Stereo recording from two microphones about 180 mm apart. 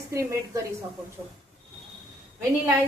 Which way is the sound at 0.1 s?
20° right (ahead or behind).